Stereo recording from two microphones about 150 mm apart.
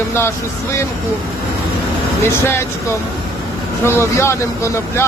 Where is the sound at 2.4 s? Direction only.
15° left (ahead or behind).